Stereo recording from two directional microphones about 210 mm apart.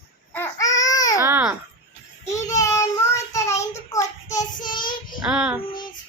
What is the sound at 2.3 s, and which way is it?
Child singing, 15° left (ahead or behind).